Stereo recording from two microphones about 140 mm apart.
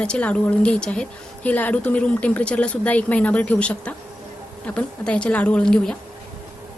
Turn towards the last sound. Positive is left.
turn(degrees=5)  # may be behind; listen again after turning